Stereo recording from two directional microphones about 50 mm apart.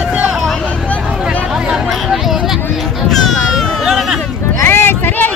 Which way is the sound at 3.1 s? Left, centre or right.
Centre.